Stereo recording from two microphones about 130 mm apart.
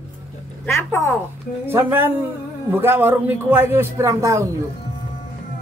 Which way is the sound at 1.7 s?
15° right (ahead or behind).